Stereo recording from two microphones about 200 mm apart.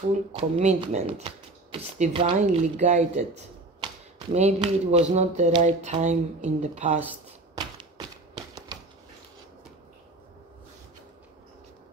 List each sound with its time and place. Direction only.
0.1 s speech: 30° right (ahead or behind)
8.4 s typewriter: 20° right (ahead or behind)